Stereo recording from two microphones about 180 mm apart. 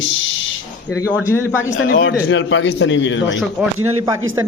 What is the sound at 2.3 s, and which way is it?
A man's voice, 90° left.